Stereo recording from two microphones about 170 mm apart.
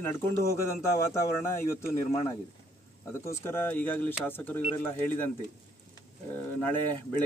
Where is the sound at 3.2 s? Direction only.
15° left (ahead or behind).